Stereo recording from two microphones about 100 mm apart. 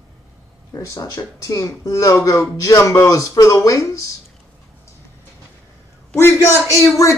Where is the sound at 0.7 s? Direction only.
35° left (ahead or behind).